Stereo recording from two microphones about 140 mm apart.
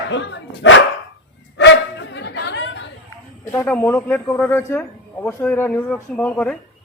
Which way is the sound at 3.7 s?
15° left (ahead or behind).